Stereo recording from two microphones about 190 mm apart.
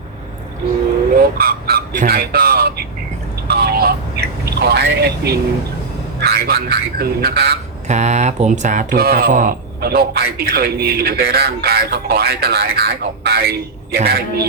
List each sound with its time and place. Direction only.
1.4 s a sound: 55° right (ahead or behind)
6.1 s speech: 55° right (ahead or behind)
7.9 s speech: 35° right (ahead or behind); by 14.4 s 55° right (ahead or behind)